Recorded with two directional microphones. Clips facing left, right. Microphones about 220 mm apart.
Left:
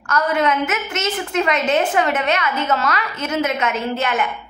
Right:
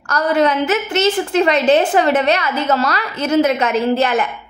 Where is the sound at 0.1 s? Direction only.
35° right (ahead or behind).